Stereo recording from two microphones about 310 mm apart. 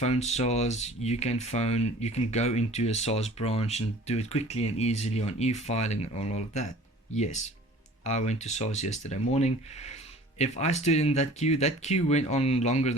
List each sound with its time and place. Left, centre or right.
0.0 s speech: left